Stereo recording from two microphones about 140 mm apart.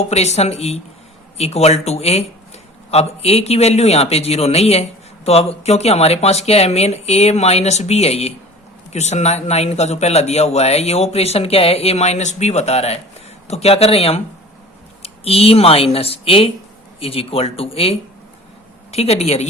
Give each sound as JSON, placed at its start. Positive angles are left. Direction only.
{"t": 0.0, "sound": "a man's voice", "side_deg": 50}